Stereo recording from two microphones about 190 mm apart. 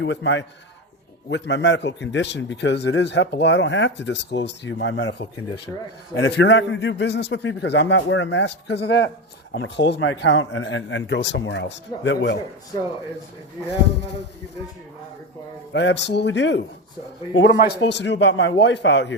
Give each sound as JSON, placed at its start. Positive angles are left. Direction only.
{"t": 0.0, "sound": "a man's voice", "side_deg": 75}
{"t": 15.7, "sound": "a man's voice", "side_deg": 70}